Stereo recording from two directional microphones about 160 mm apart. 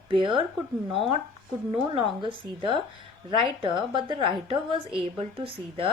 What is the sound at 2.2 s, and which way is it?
Speech, 30° right (ahead or behind).